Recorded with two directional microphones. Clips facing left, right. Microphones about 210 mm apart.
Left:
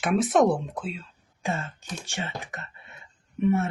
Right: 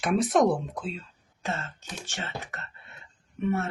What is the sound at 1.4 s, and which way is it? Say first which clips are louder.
Speech: left 3 dB; 10° left (ahead or behind).